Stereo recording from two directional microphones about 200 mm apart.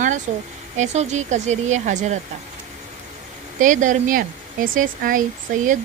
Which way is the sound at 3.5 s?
40° right (ahead or behind).